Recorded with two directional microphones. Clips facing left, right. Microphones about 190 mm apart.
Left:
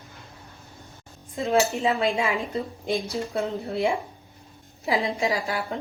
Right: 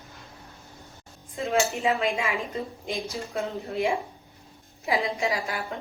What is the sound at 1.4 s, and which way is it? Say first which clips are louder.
A woman's voice: left 3 dB; 35° left (ahead or behind).